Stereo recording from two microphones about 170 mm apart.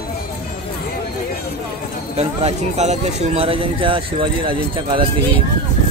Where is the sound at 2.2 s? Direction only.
40° right (ahead or behind).